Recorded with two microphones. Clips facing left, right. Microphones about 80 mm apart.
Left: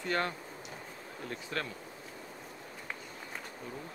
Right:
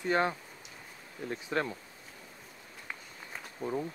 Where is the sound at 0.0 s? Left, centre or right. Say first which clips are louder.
Right 4 dB; centre.